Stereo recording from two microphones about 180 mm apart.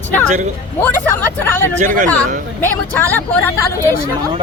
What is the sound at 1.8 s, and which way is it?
Speech, 45° right (ahead or behind).